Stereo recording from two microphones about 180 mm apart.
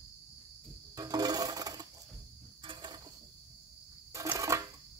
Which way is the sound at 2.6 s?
25° right (ahead or behind).